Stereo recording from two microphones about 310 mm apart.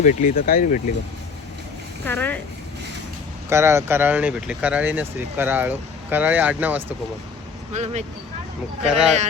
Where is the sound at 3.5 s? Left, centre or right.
Centre.